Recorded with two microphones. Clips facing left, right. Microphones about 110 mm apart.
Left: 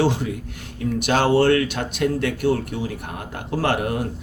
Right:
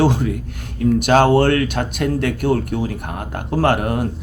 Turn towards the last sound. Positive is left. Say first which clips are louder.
# right 4 dB
turn(degrees=-50)  # may be behind; listen again after turning